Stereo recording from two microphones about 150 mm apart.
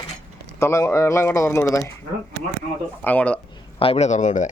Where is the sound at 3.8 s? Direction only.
45° left (ahead or behind).